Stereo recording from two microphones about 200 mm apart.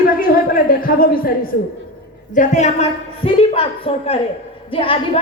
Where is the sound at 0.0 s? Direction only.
45° left (ahead or behind).